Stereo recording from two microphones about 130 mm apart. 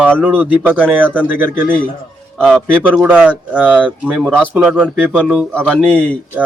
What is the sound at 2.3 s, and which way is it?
Speech, centre (ahead or behind).